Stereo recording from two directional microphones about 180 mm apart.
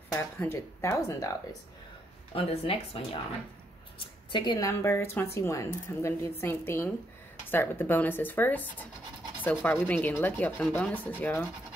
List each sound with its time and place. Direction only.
0.1 s speech: 10° left (ahead or behind)
2.3 s speech: 30° left (ahead or behind)
4.3 s speech: 25° left (ahead or behind); by 11.4 s 10° left (ahead or behind)